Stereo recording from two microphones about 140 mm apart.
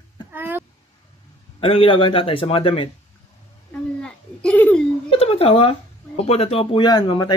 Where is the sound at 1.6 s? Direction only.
40° left (ahead or behind).